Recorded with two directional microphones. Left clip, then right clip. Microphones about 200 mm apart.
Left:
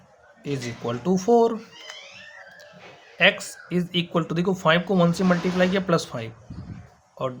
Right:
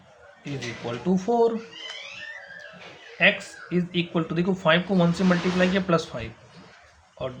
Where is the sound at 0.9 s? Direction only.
40° left (ahead or behind).